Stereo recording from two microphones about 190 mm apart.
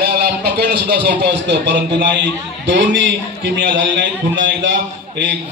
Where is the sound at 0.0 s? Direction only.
55° right (ahead or behind).